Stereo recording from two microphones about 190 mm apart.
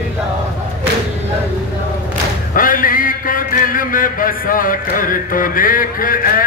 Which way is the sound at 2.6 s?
45° left (ahead or behind).